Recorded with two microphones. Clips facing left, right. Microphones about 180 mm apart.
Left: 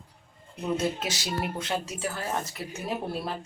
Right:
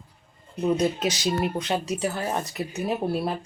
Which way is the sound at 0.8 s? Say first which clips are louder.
Right 6 dB; 20° right (ahead or behind).